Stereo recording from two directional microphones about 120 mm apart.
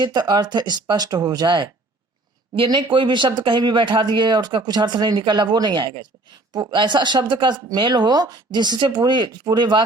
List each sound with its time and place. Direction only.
0.0 s speech: 35° right (ahead or behind)